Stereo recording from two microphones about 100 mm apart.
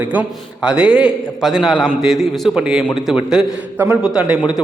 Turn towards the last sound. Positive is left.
turn(degrees=-10)  # may be behind; listen again after turning